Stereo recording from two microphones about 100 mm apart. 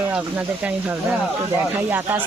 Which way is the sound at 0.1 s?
15° right (ahead or behind).